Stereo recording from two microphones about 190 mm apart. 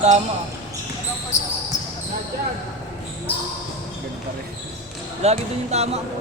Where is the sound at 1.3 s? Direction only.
40° left (ahead or behind).